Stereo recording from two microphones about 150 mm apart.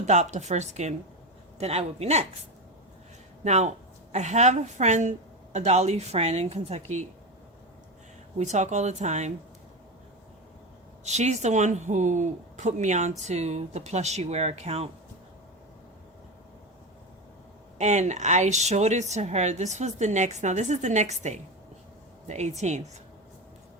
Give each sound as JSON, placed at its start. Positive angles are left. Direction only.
{"t": 0.0, "sound": "speech", "side_deg": -50}
{"t": 3.4, "sound": "a woman's voice", "side_deg": -50}
{"t": 8.4, "sound": "speech", "side_deg": -50}
{"t": 11.0, "sound": "speech", "side_deg": -50}
{"t": 17.7, "sound": "speech", "side_deg": -50}